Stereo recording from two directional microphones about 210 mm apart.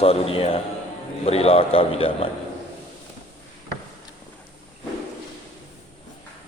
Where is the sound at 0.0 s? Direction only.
25° left (ahead or behind).